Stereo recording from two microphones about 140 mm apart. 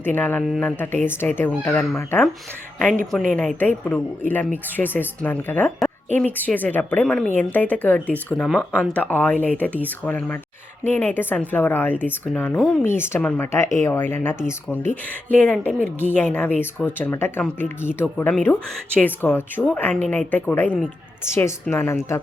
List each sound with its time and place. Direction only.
0.0 s a woman's voice: 15° left (ahead or behind)